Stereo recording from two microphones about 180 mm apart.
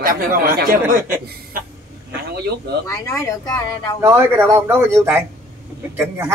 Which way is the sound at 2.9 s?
15° left (ahead or behind).